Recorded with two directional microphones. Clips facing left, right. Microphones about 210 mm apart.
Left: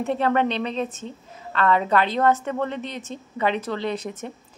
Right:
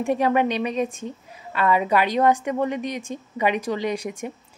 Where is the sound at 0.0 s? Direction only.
10° right (ahead or behind).